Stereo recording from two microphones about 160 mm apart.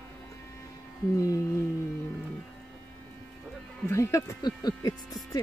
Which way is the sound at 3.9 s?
20° left (ahead or behind).